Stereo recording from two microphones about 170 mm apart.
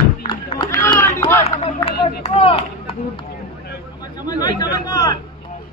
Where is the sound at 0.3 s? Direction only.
25° left (ahead or behind).